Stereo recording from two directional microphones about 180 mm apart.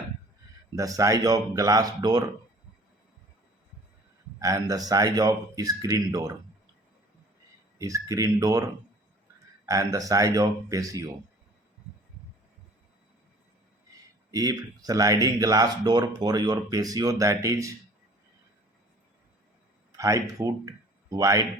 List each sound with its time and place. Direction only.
0.8 s speech: 20° right (ahead or behind)
4.4 s speech: 20° right (ahead or behind)
7.8 s speech: 20° right (ahead or behind)
14.3 s speech: 20° right (ahead or behind)
20.0 s speech: 20° right (ahead or behind)